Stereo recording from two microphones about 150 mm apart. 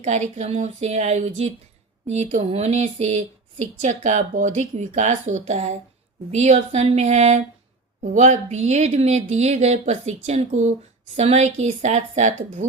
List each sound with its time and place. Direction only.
0.0 s speech: 50° right (ahead or behind)